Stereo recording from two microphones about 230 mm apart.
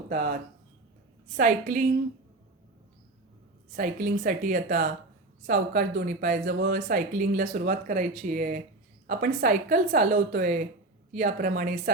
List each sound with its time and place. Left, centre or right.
1.4 s speech: right
3.8 s speech: right